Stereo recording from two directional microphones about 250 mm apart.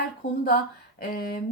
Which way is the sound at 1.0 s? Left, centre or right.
Left.